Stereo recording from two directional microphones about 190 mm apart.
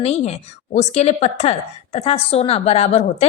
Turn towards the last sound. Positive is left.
turn(degrees=35)  # may be behind; listen again after turning